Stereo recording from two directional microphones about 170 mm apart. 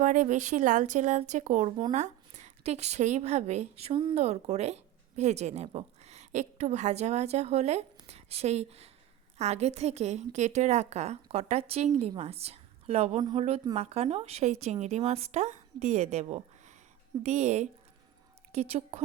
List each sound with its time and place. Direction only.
0.0 s a woman's voice: 45° right (ahead or behind)